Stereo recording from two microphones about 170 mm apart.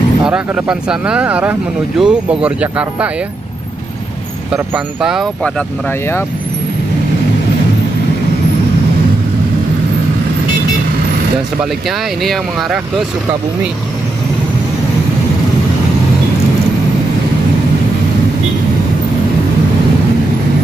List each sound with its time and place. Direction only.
0.2 s speech: 5° right (ahead or behind)
4.5 s speech: 5° right (ahead or behind)
12.2 s speech: centre (ahead or behind)